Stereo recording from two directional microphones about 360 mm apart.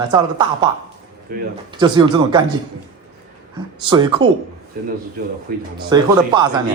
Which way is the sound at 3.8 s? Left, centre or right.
Centre.